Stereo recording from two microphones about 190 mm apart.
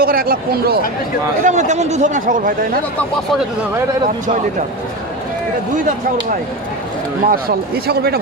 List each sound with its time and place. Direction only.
0.0 s speech: 50° right (ahead or behind)
1.5 s speech: 40° right (ahead or behind)
7.3 s a man's voice: 55° right (ahead or behind)